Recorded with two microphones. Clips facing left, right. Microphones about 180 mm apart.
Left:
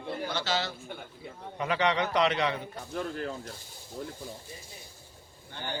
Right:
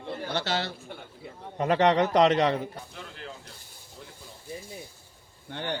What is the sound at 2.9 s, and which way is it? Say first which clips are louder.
Speech: left 9 dB; 45° left (ahead or behind).